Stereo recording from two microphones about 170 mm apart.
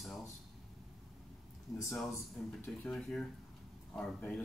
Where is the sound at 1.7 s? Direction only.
Centre (ahead or behind).